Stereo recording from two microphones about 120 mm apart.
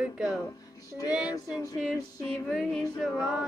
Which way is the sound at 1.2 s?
30° left (ahead or behind).